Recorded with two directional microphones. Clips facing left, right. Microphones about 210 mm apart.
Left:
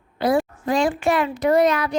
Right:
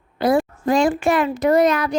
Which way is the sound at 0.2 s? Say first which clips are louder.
Right 2 dB; 45° right (ahead or behind).